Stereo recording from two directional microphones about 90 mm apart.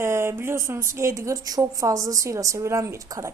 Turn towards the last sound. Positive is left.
turn(degrees=-35)  # may be behind; listen again after turning